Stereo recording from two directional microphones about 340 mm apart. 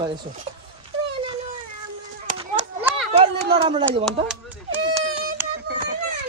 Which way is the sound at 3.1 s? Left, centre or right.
Centre.